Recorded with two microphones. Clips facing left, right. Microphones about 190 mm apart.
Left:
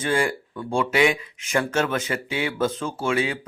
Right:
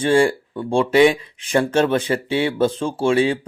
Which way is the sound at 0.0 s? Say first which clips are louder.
Right 7 dB; 30° right (ahead or behind).